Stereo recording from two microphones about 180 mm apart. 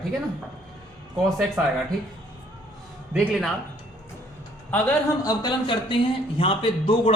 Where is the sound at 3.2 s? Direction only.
5° right (ahead or behind).